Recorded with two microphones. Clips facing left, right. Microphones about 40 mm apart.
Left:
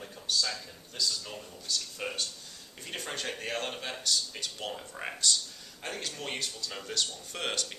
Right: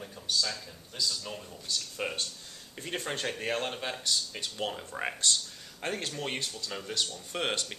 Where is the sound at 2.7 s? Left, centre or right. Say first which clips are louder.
Right 3 dB; right; by 5.1 s centre.